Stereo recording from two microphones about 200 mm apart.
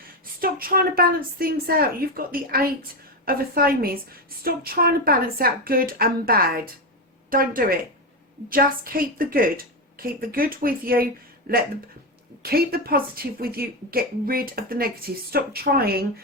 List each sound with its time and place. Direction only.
0.3 s a woman's voice: 45° right (ahead or behind)